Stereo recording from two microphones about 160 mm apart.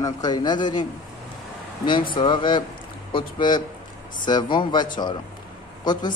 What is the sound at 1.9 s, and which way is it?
Speech, 30° left (ahead or behind).